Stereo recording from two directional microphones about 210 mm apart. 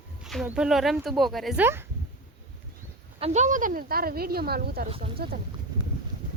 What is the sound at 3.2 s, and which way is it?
Speech, 35° right (ahead or behind).